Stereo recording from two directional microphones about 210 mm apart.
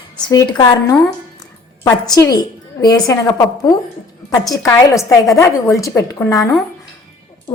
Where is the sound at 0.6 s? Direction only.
15° left (ahead or behind).